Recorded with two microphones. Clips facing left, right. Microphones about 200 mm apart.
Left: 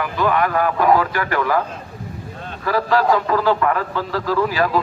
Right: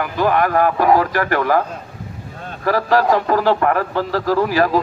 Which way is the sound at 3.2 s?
40° right (ahead or behind).